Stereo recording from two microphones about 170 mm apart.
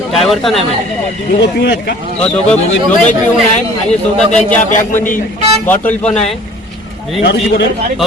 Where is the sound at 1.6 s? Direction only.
80° left.